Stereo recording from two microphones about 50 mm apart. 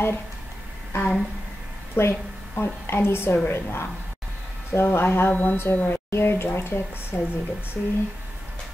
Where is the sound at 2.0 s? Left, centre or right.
Left.